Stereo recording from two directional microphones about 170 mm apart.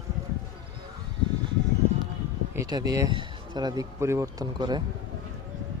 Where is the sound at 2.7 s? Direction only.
25° right (ahead or behind).